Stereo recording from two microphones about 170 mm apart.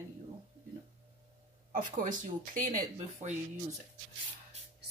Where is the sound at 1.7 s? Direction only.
50° right (ahead or behind).